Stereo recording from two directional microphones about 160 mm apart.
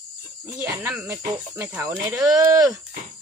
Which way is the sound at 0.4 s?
10° right (ahead or behind).